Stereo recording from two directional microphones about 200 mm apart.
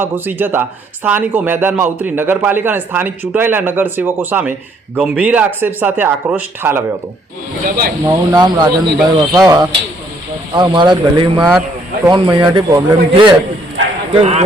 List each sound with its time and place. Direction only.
0.0 s speech: 10° right (ahead or behind)
8.0 s speech: 20° right (ahead or behind)
14.1 s speech: 35° right (ahead or behind)